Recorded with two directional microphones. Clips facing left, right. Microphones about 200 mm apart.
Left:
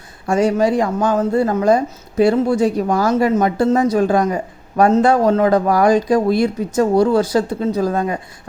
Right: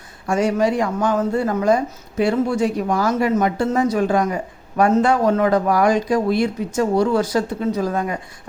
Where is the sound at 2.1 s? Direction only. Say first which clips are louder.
Left 4 dB; 35° left (ahead or behind).